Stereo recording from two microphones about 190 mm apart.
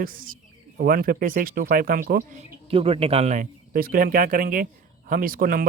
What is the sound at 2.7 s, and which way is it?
Speech, 30° right (ahead or behind).